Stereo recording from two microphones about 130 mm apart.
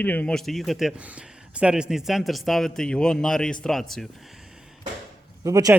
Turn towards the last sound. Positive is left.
turn(degrees=-25)  # may be behind; listen again after turning